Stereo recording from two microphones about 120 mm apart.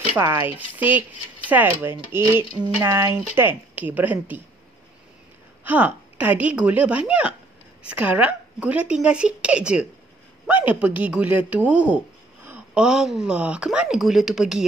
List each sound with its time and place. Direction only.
0.2 s speech: 20° right (ahead or behind)
5.6 s speech: 15° right (ahead or behind)